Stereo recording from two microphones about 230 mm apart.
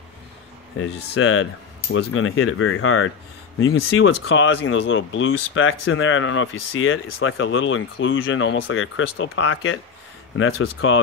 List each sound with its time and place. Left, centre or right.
1.2 s speech: left